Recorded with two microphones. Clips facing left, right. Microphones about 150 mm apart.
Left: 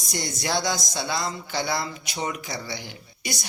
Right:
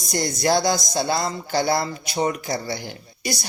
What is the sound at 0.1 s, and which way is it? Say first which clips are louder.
A man's voice: right 7 dB; 40° right (ahead or behind).